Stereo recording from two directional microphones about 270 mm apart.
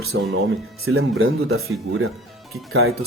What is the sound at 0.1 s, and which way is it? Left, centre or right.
Speech, right.